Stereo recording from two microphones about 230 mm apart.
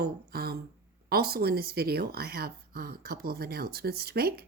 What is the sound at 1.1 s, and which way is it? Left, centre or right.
Speech, right.